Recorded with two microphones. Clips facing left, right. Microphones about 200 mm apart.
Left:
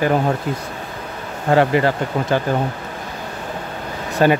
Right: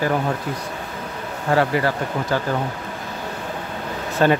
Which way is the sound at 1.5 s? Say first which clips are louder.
Left 4 dB; 20° left (ahead or behind).